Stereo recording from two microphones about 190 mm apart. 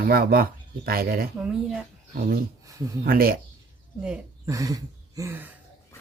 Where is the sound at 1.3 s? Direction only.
5° right (ahead or behind).